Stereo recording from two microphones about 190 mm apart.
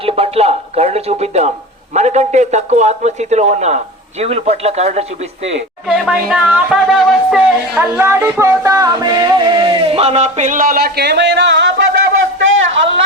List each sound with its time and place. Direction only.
0.0 s speech: 30° right (ahead or behind)
5.9 s speech: 5° right (ahead or behind); by 11.7 s 65° right (ahead or behind)
12.4 s a sound: 90° right